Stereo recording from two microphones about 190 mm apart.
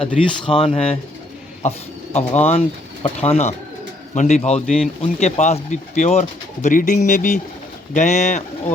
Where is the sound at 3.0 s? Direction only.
30° left (ahead or behind).